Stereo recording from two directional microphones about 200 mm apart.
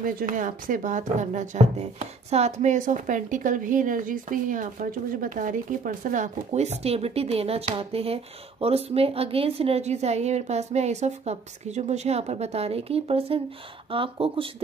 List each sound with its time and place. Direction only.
0.0 s speech: 40° right (ahead or behind); by 14.5 s 25° right (ahead or behind)